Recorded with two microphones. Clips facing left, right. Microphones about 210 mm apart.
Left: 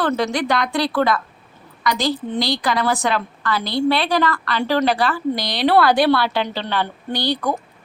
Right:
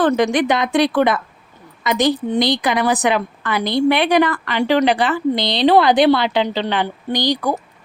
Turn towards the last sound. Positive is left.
turn(degrees=-10)  # may be behind; listen again after turning